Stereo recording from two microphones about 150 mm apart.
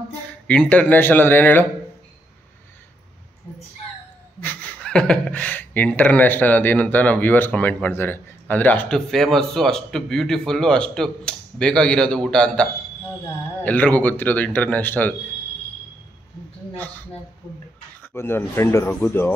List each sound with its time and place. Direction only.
0.3 s speech: 10° left (ahead or behind)
4.4 s speech: 10° left (ahead or behind)
13.7 s speech: 10° left (ahead or behind)
16.7 s speech: 10° left (ahead or behind)